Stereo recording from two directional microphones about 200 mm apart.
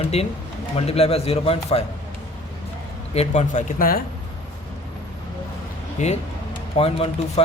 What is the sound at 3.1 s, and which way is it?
Speech, 30° left (ahead or behind).